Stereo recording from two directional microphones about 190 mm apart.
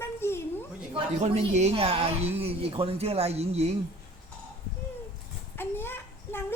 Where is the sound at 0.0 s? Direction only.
15° left (ahead or behind).